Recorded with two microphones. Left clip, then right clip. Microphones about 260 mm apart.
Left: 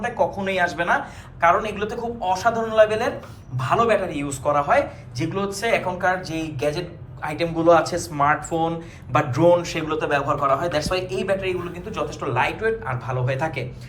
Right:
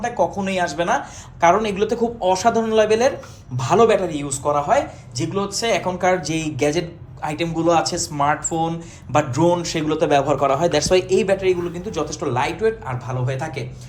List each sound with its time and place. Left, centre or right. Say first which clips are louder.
0.3 s a man's voice: right 1 dB; centre